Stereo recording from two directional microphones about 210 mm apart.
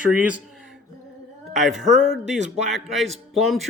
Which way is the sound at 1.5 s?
Centre (ahead or behind).